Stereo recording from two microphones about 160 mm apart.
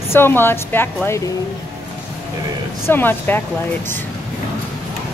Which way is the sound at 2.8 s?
15° left (ahead or behind).